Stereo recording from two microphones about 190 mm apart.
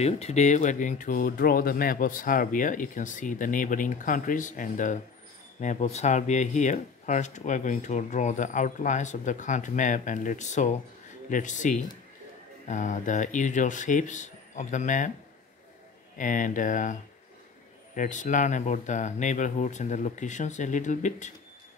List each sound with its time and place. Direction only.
0.0 s speech: 35° left (ahead or behind)
16.2 s speech: 45° left (ahead or behind)